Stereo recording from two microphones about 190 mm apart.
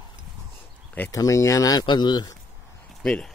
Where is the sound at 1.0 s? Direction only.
15° left (ahead or behind).